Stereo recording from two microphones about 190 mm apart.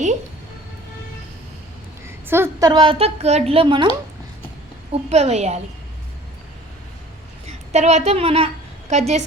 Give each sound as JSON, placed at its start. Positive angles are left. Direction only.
{"t": 2.0, "sound": "a woman's voice", "side_deg": -10}
{"t": 4.9, "sound": "a woman's voice", "side_deg": -35}
{"t": 7.4, "sound": "a woman's voice", "side_deg": -35}